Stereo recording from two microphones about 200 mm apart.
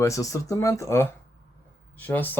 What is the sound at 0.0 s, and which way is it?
Speech, 15° left (ahead or behind).